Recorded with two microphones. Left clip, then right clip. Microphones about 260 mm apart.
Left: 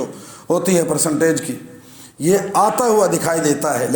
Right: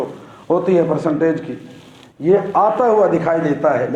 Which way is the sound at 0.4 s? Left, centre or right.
Left.